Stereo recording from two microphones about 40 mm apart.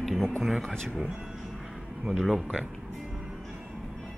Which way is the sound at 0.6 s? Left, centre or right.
Centre.